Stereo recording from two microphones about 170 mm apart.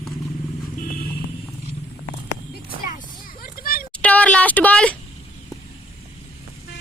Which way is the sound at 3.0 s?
55° left (ahead or behind).